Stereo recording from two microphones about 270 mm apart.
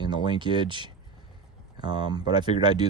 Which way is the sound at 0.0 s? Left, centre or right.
Centre.